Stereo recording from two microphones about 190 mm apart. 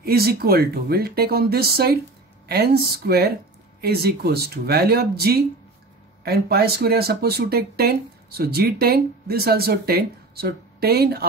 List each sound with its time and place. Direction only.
0.0 s speech: 55° right (ahead or behind)